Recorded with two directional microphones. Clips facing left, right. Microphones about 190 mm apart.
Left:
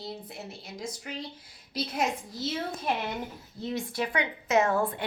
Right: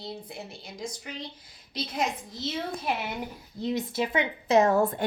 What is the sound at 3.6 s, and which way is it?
Speech, 20° right (ahead or behind).